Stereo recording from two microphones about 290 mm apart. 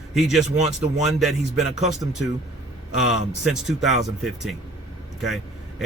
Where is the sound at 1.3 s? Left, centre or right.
Right.